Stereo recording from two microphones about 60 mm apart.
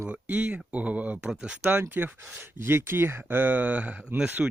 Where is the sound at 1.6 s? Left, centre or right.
Right; by 4.5 s centre.